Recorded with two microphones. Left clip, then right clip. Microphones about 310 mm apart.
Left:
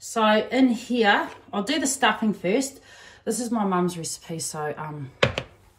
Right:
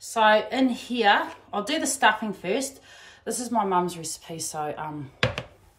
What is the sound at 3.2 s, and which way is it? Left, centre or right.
Speech, centre.